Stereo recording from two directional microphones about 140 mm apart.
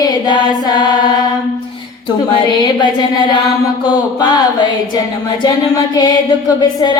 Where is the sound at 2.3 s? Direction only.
30° left (ahead or behind).